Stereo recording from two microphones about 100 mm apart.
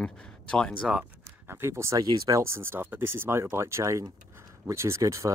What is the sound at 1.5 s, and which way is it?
Speech, 25° right (ahead or behind).